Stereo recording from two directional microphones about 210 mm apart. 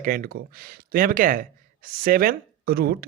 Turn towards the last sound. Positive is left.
turn(degrees=-45)  # may be behind; listen again after turning